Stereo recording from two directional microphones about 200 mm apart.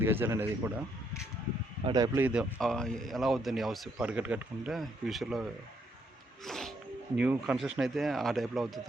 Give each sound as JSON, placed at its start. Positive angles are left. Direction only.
{"t": 0.0, "sound": "speech", "side_deg": -10}
{"t": 1.8, "sound": "speech", "side_deg": -20}
{"t": 2.2, "sound": "a man's voice", "side_deg": -5}
{"t": 6.4, "sound": "sneeze", "side_deg": 0}
{"t": 7.2, "sound": "a man's voice", "side_deg": -5}